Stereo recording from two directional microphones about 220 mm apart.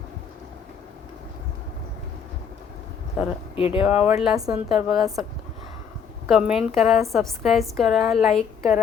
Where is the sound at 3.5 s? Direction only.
25° left (ahead or behind).